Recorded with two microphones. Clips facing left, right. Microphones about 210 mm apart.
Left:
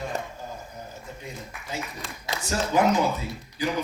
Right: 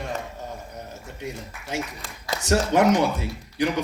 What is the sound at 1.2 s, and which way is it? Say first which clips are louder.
A man's voice: right 5 dB; 80° right.